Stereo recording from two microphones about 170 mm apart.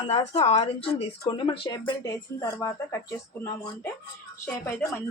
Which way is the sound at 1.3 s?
25° left (ahead or behind).